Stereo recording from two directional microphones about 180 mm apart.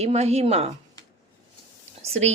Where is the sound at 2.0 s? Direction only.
35° right (ahead or behind).